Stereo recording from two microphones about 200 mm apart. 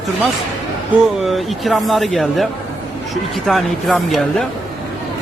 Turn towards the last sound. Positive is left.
turn(degrees=0)  # may be behind; listen again after turning